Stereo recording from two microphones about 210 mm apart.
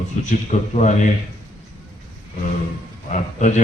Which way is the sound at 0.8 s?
35° left (ahead or behind).